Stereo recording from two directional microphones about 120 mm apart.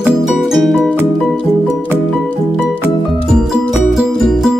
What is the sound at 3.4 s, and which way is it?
Music, 5° right (ahead or behind).